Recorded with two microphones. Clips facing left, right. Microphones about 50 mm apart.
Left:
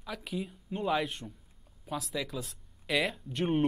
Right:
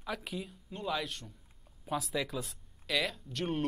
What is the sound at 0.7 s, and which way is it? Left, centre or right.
Speech, centre.